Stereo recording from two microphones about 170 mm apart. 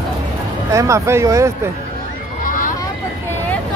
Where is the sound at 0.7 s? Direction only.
15° right (ahead or behind).